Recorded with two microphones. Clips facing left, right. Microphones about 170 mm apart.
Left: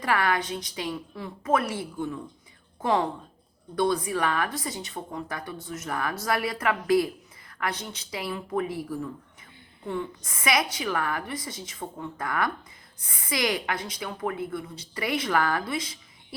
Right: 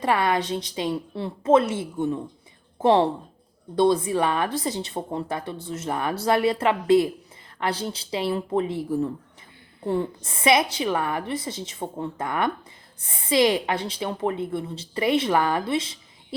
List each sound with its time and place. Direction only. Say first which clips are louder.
0.0 s speech: right 3 dB; 25° right (ahead or behind)
9.8 s speech: right 6 dB; 35° right (ahead or behind)